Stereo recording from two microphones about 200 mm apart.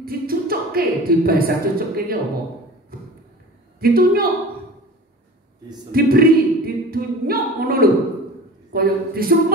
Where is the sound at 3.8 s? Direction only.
50° right (ahead or behind).